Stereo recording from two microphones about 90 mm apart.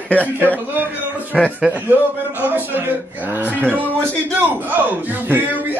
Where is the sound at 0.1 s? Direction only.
20° left (ahead or behind).